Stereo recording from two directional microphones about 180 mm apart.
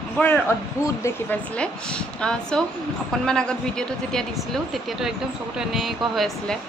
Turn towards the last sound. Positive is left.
turn(degrees=0)  # may be behind; listen again after turning